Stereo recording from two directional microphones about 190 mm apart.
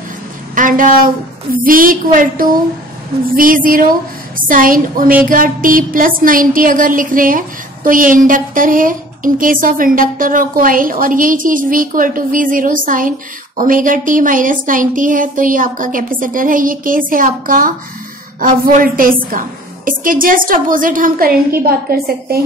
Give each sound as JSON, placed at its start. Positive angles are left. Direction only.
{"t": 0.6, "sound": "a woman's voice", "side_deg": -45}